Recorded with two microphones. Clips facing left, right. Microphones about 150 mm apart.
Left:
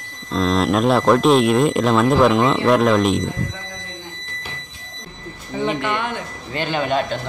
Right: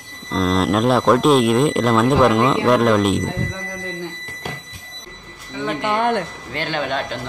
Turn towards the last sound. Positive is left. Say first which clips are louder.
# left 3 dB
turn(degrees=5)  # may be behind; listen again after turning